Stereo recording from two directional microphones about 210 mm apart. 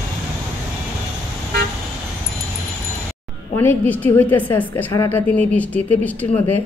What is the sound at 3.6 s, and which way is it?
Speech, 10° left (ahead or behind).